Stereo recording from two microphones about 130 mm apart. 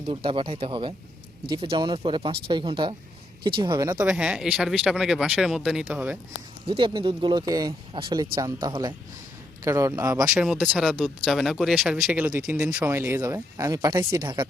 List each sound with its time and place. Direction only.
0.0 s speech: 45° right (ahead or behind)
3.9 s speech: 10° right (ahead or behind)
6.7 s speech: 40° right (ahead or behind)
8.7 s speech: 40° right (ahead or behind)
9.6 s speech: 25° right (ahead or behind)
10.2 s speech: 5° right (ahead or behind)
12.8 s speech: 20° right (ahead or behind); by 14.4 s 35° right (ahead or behind)